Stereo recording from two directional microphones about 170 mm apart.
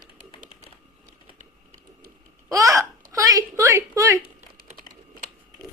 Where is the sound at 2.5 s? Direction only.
20° right (ahead or behind).